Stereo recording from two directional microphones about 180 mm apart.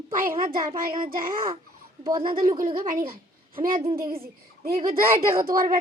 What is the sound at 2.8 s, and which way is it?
Speech, 55° right (ahead or behind).